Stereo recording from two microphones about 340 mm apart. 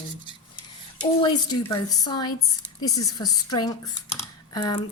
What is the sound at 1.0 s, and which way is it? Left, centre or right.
Speech, centre.